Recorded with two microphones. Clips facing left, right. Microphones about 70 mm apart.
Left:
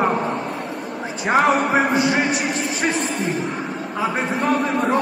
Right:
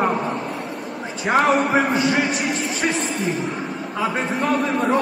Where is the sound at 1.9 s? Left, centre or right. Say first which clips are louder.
Left 1 dB; centre.